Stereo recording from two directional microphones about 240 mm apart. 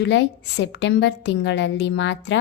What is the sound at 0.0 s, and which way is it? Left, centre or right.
A woman's voice, left.